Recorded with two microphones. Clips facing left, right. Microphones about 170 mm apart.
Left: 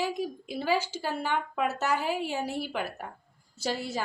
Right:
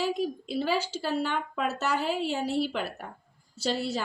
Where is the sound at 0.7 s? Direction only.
50° left (ahead or behind).